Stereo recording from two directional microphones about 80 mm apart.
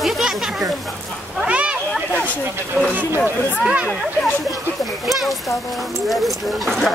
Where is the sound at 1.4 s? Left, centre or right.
Centre.